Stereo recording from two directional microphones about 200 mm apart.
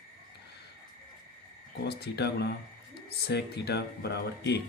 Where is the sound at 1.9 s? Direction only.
55° left (ahead or behind).